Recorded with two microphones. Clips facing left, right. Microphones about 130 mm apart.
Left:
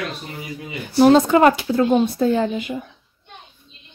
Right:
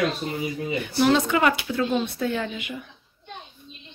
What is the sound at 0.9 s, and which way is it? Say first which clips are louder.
Speech: left 8 dB; 40° left (ahead or behind).